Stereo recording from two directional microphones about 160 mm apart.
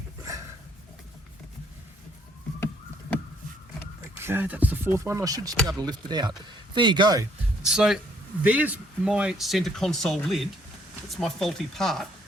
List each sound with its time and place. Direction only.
4.2 s speech: 15° right (ahead or behind)
7.6 s speech: 5° right (ahead or behind)